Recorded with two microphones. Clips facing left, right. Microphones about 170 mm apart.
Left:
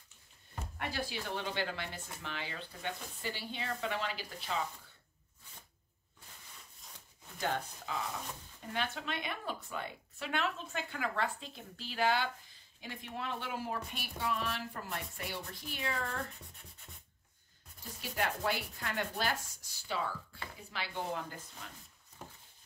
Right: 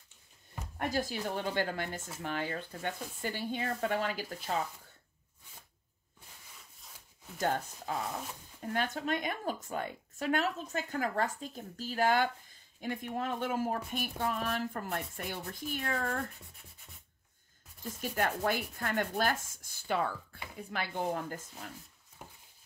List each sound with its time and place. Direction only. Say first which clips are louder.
0.7 s speech: right 6 dB; 45° right (ahead or behind)
7.3 s speech: right 4 dB; 45° right (ahead or behind)
18.0 s speech: right 3 dB; 50° right (ahead or behind)
22.2 s a sound: left 1 dB; 10° right (ahead or behind)